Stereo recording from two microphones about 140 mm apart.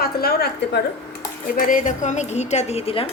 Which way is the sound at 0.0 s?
90° left.